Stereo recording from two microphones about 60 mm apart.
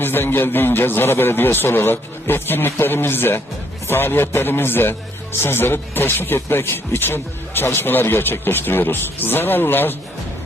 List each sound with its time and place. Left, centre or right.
0.0 s speech: left